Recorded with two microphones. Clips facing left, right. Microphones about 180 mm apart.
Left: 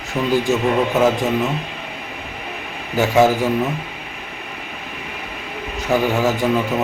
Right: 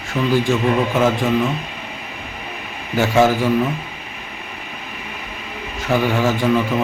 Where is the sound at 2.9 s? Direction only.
15° left (ahead or behind).